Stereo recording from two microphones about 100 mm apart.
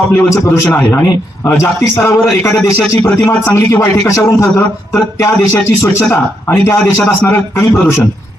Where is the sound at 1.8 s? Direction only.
30° left (ahead or behind).